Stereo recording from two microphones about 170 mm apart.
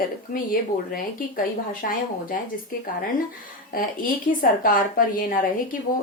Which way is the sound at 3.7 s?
55° left (ahead or behind).